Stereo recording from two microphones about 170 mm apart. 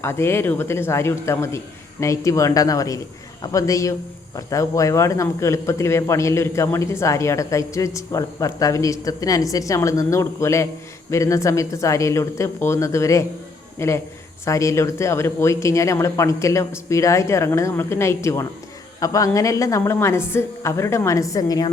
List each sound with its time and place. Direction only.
0.0 s a woman's voice: 15° left (ahead or behind)